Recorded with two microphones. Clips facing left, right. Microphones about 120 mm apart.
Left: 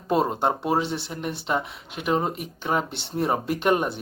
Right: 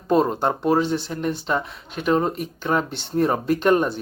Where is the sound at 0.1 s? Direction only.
15° left (ahead or behind).